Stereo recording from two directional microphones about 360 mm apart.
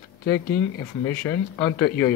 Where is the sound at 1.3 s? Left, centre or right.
Centre.